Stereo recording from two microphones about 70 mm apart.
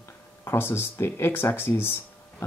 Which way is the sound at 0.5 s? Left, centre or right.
Left.